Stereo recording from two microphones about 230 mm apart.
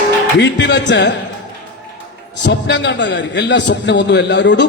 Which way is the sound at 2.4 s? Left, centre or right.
Left.